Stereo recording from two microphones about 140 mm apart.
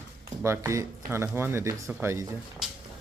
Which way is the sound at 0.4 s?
20° right (ahead or behind).